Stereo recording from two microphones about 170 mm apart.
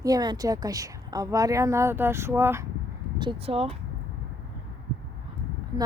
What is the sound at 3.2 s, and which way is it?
Speech, 30° right (ahead or behind).